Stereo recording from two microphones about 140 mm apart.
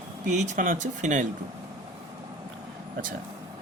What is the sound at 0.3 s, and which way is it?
Speech, 60° right (ahead or behind).